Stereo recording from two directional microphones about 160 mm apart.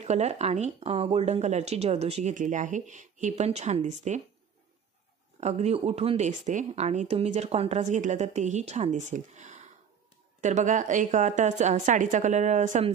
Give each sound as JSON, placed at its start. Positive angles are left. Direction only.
{"t": 0.0, "sound": "speech", "side_deg": -45}
{"t": 5.4, "sound": "speech", "side_deg": -40}